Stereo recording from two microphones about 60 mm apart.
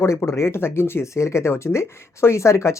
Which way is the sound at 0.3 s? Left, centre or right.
Left.